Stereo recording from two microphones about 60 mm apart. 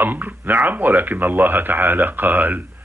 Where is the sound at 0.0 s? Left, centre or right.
Right.